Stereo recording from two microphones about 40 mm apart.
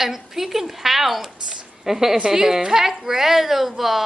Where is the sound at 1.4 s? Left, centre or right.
Right.